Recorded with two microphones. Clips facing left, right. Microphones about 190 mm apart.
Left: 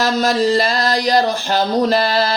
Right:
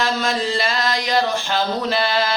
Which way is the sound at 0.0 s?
40° left (ahead or behind).